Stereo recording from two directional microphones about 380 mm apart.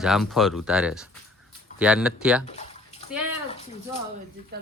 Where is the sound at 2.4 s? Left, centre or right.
Centre.